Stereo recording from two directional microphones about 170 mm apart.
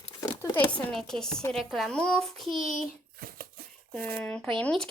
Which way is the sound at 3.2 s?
60° right (ahead or behind).